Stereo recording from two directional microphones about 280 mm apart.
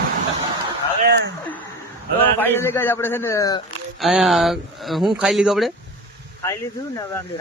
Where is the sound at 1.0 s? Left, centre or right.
Right.